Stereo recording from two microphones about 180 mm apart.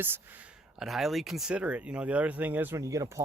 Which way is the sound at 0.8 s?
Centre (ahead or behind).